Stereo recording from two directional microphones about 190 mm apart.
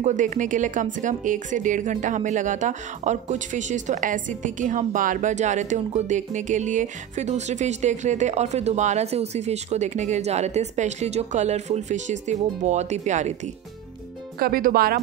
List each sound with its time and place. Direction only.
0.0 s speech: 40° right (ahead or behind)
14.4 s speech: 50° right (ahead or behind)